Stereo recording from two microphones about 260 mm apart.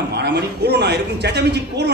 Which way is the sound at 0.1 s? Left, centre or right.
Right.